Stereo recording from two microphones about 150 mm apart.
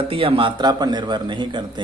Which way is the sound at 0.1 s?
35° right (ahead or behind).